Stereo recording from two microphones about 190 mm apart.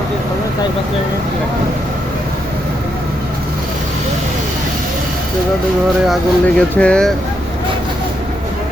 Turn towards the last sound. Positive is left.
turn(degrees=5)  # may be behind; listen again after turning